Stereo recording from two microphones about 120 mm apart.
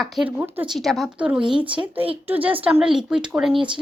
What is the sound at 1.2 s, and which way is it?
Speech, 10° right (ahead or behind).